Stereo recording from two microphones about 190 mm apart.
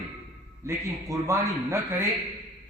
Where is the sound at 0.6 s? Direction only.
15° right (ahead or behind).